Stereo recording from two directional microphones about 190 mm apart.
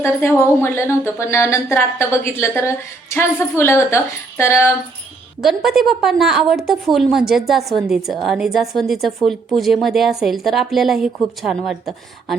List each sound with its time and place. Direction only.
0.0 s speech: 15° left (ahead or behind)
5.4 s speech: centre (ahead or behind)